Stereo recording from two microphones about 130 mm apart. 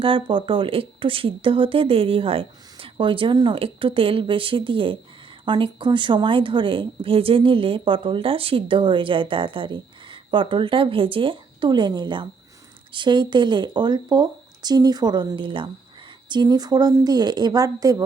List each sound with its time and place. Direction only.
0.0 s a woman's voice: 40° right (ahead or behind)